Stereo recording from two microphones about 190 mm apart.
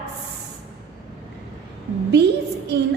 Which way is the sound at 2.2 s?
60° right (ahead or behind).